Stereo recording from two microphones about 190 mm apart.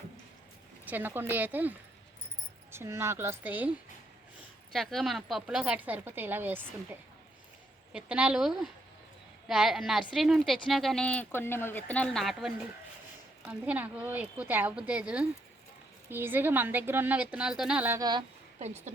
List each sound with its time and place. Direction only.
0.9 s a woman's voice: 10° right (ahead or behind)
2.7 s a woman's voice: 15° right (ahead or behind)
7.9 s a woman's voice: 5° right (ahead or behind); by 18.3 s 20° right (ahead or behind)
18.6 s speech: 35° right (ahead or behind)